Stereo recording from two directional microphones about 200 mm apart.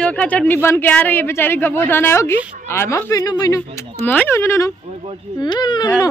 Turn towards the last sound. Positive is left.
turn(degrees=20)  # may be behind; listen again after turning